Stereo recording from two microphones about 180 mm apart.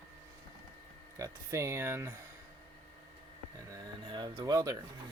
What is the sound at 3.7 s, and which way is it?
Speech, 25° right (ahead or behind).